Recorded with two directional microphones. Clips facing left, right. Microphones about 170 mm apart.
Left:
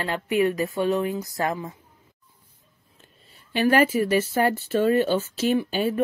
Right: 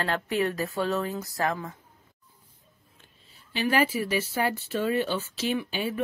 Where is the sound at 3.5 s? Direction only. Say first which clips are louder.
Left 5 dB; 55° left (ahead or behind).